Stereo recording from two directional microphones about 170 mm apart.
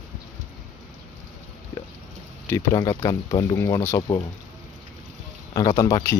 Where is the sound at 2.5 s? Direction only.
20° left (ahead or behind).